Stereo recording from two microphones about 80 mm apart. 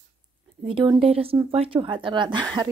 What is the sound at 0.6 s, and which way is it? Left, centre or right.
A woman's voice, right.